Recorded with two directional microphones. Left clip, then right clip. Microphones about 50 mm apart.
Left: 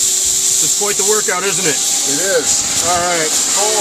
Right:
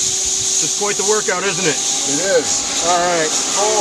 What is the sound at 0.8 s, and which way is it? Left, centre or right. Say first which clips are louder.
Speech: left 1 dB; left.